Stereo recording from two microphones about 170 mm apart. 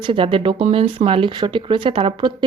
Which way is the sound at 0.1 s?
30° right (ahead or behind).